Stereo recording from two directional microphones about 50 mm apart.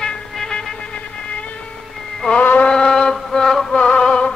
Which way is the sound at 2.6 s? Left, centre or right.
Centre.